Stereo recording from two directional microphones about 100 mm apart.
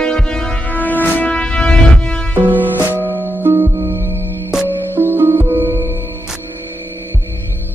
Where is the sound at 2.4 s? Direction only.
20° right (ahead or behind).